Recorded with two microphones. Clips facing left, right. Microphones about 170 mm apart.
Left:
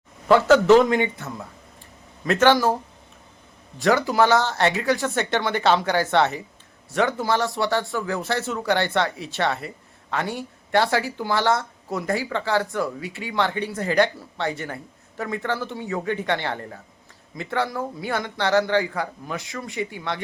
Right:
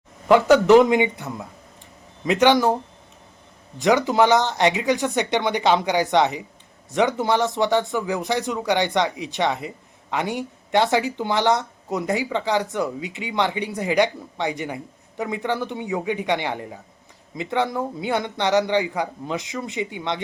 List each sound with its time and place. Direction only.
0.3 s speech: 15° right (ahead or behind)
3.8 s a man's voice: 20° right (ahead or behind)